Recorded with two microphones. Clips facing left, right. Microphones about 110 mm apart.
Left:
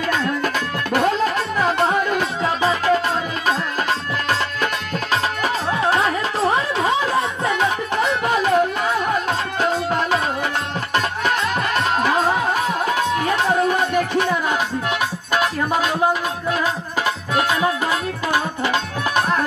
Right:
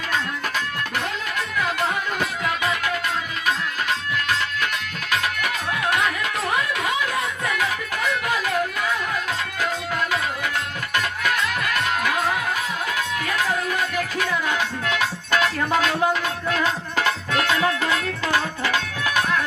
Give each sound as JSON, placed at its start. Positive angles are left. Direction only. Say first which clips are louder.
{"t": 0.9, "sound": "music", "louder": "left 12 dB", "side_deg": 35}
{"t": 5.1, "sound": "music", "louder": "left 3 dB", "side_deg": 30}
{"t": 14.5, "sound": "music", "louder": "left 3 dB", "side_deg": 15}
{"t": 17.0, "sound": "music", "louder": "left 2 dB", "side_deg": 30}
{"t": 19.1, "sound": "music", "louder": "left 3 dB", "side_deg": 40}